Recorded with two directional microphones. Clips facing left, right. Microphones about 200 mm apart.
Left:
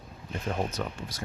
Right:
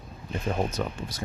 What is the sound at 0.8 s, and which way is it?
Speech, 20° right (ahead or behind).